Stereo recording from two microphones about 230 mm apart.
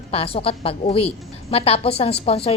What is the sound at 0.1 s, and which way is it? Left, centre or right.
A woman's voice, left.